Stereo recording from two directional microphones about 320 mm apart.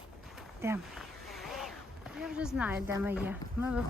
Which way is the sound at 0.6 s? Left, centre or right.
Centre.